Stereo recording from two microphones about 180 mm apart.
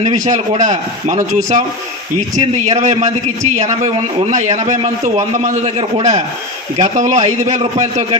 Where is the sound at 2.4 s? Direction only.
40° right (ahead or behind).